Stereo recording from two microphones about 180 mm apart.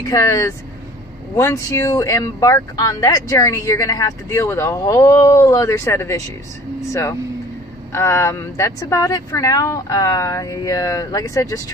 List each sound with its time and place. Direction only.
0.0 s speech: 20° left (ahead or behind)
7.9 s speech: 15° left (ahead or behind)